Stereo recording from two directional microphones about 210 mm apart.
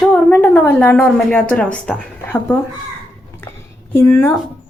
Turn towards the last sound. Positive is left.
turn(degrees=10)  # may be behind; listen again after turning